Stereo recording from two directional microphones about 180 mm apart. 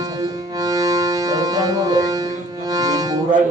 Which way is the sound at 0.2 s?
20° right (ahead or behind).